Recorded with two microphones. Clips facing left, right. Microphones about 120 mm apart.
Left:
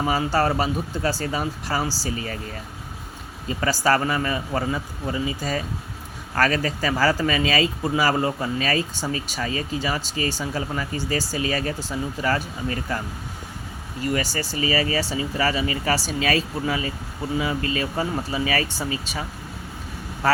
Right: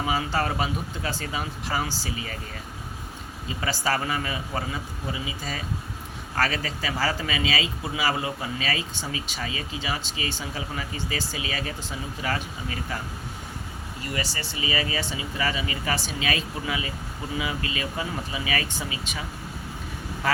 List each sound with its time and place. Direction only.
0.0 s speech: 40° left (ahead or behind)
3.6 s speech: 45° left (ahead or behind)
14.1 s speech: 40° left (ahead or behind)
20.2 s speech: 40° left (ahead or behind)